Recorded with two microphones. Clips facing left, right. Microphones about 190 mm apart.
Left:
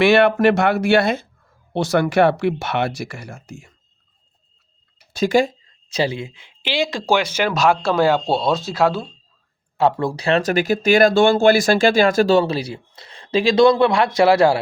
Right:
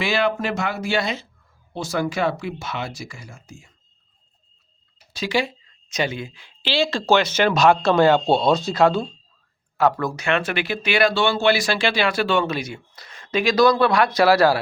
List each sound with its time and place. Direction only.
0.0 s speech: 65° left (ahead or behind)
1.7 s speech: 70° left (ahead or behind)
5.1 s speech: 45° left (ahead or behind); by 9.0 s 5° left (ahead or behind)
9.7 s speech: 25° left (ahead or behind)